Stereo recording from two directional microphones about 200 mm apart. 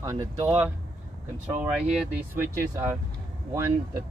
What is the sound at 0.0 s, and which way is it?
Speech, 15° right (ahead or behind).